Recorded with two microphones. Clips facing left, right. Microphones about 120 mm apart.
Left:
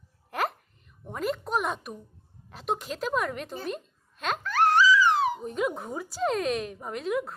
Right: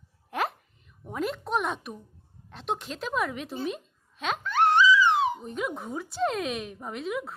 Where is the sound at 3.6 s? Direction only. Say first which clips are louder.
Right 2 dB; centre (ahead or behind).